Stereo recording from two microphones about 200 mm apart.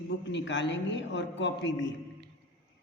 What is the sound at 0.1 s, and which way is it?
A man's voice, 65° left (ahead or behind).